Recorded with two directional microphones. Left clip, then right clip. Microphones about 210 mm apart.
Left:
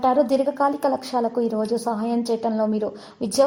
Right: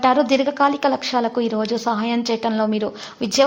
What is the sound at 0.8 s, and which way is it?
A woman's voice, 35° right (ahead or behind).